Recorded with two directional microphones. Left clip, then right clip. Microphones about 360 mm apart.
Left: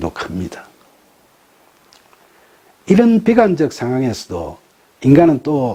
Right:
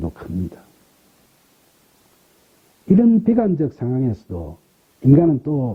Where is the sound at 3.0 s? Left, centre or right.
Centre.